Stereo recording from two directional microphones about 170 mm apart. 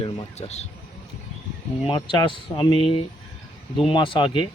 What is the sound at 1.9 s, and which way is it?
Speech, 30° left (ahead or behind).